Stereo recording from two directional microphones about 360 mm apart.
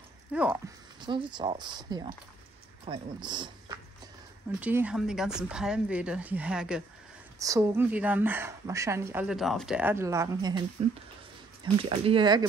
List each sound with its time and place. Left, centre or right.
0.3 s a woman's voice: centre
11.6 s a woman's voice: centre